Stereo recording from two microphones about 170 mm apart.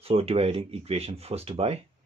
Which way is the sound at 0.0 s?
35° right (ahead or behind).